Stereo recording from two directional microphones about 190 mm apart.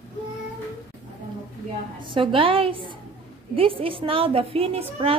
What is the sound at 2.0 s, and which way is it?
A woman's voice, 25° right (ahead or behind).